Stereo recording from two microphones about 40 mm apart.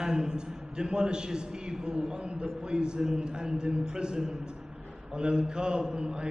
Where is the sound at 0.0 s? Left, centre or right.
Centre.